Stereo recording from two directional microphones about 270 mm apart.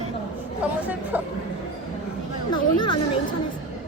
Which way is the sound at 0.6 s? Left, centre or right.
Centre.